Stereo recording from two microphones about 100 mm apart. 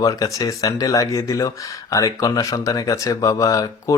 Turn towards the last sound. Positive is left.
turn(degrees=35)  # may be behind; listen again after turning